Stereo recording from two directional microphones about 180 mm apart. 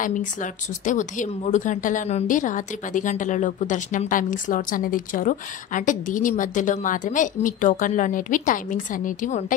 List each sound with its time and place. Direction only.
0.0 s a woman's voice: 45° left (ahead or behind)